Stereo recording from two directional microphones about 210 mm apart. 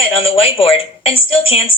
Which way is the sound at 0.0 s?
25° left (ahead or behind).